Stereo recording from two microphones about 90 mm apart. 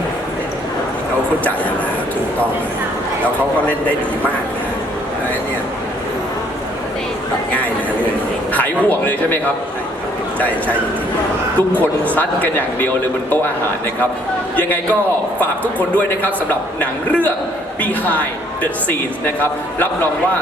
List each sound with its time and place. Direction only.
7.5 s a man's voice: 15° left (ahead or behind)
11.8 s speech: 15° left (ahead or behind)
15.6 s speech: 15° left (ahead or behind)
18.6 s a man's voice: 20° left (ahead or behind)